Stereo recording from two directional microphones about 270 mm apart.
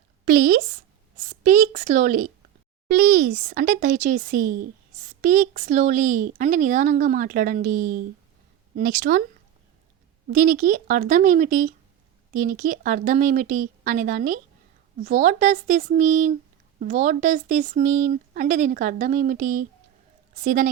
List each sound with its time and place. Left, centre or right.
0.3 s a woman's voice: right
10.3 s speech: right